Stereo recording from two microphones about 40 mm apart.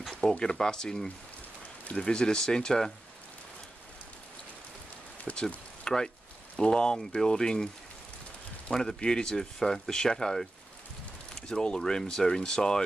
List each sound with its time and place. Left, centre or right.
0.1 s speech: left
5.3 s speech: left
5.9 s a sound: centre
7.1 s speech: centre
8.7 s speech: left
9.0 s speech: centre